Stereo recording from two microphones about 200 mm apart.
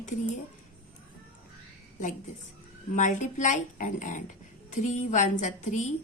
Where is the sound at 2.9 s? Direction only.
40° left (ahead or behind).